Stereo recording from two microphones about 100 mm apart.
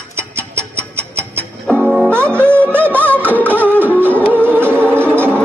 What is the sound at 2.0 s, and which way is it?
Music, 25° right (ahead or behind).